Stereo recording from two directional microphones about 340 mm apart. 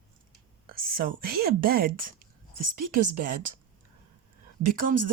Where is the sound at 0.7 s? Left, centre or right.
Right.